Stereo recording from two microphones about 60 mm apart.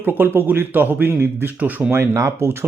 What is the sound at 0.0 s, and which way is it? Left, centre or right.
Speech, right.